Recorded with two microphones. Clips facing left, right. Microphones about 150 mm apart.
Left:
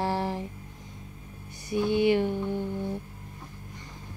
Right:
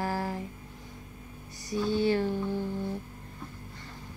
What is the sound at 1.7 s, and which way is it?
Speech, 15° left (ahead or behind).